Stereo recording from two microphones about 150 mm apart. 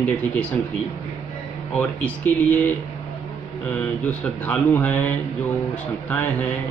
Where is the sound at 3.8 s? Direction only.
10° left (ahead or behind).